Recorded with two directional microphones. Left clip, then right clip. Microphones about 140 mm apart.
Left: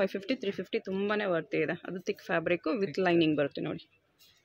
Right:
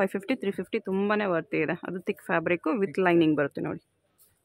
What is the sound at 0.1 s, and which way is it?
Speech, 35° right (ahead or behind).